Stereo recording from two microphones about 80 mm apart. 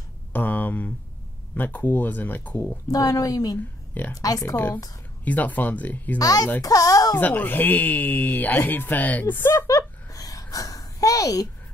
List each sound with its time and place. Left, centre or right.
0.3 s speech: left
2.9 s a woman's voice: left
5.2 s speech: centre
6.1 s a woman's voice: left
7.2 s speech: left
9.7 s a sound: left